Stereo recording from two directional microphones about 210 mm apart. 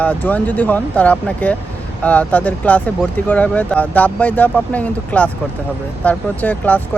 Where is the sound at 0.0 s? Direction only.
5° left (ahead or behind).